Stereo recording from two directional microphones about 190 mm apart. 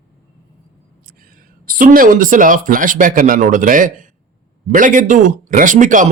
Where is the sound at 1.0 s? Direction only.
50° right (ahead or behind).